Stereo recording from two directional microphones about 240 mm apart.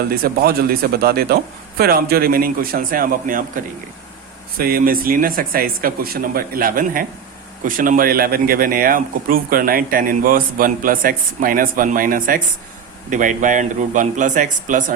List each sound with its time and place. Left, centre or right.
0.1 s speech: right